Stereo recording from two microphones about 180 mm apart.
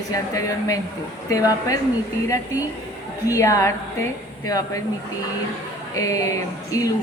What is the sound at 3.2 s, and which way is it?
A woman's voice, 20° left (ahead or behind).